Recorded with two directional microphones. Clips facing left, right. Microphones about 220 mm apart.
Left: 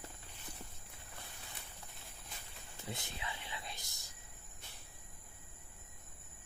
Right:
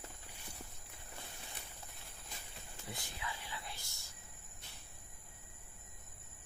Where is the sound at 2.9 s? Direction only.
20° left (ahead or behind).